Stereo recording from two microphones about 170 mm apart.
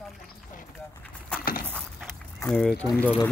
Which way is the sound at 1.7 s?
5° left (ahead or behind).